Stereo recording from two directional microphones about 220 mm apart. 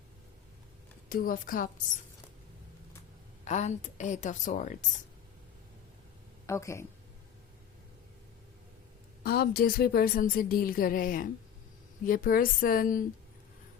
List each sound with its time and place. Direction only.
1.1 s a woman's voice: 40° left (ahead or behind)
3.4 s a woman's voice: 30° left (ahead or behind)
6.4 s speech: 15° left (ahead or behind)
9.2 s a woman's voice: 45° left (ahead or behind)